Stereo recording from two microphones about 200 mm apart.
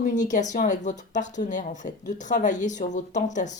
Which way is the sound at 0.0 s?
40° left (ahead or behind).